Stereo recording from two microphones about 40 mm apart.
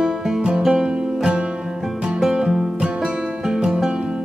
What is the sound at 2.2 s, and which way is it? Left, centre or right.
Music, centre.